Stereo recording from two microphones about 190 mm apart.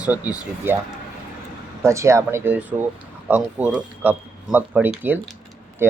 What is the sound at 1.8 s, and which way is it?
Speech, 15° right (ahead or behind).